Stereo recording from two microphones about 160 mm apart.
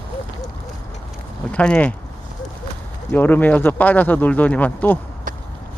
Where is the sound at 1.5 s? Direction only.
10° left (ahead or behind).